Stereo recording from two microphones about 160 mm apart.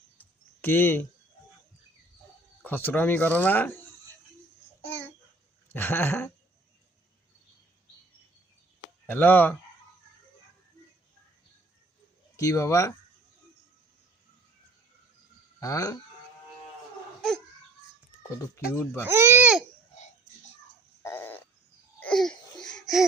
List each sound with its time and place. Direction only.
0.2 s a sound: 15° left (ahead or behind)
2.6 s speech: 10° left (ahead or behind)
5.7 s speech: 15° left (ahead or behind)
9.0 s speech: 10° left (ahead or behind)
12.4 s speech: 20° left (ahead or behind)
15.6 s speech: 20° left (ahead or behind)
18.5 s speech: 15° left (ahead or behind)
19.0 s speech: 15° right (ahead or behind)
21.0 s a sound: 15° left (ahead or behind)
22.0 s laughter: 5° left (ahead or behind)